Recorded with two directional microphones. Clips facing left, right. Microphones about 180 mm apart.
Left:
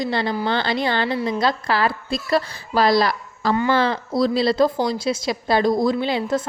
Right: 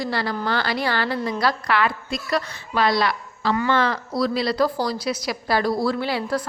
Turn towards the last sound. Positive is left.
turn(degrees=20)  # may be behind; listen again after turning